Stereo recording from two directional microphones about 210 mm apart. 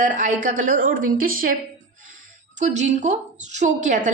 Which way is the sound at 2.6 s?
35° right (ahead or behind).